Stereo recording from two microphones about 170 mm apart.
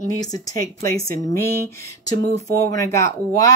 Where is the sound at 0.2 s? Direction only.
20° left (ahead or behind).